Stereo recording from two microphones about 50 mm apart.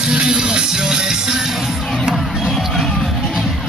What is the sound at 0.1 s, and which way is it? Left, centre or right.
Music, centre.